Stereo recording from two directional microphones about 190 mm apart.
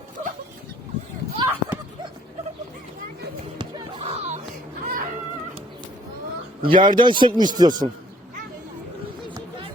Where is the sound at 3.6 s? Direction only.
35° right (ahead or behind).